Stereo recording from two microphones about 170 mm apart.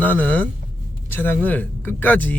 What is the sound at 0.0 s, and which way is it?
Speech, 10° left (ahead or behind).